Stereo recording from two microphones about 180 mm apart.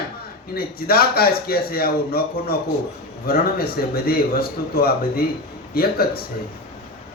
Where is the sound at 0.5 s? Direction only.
55° left (ahead or behind).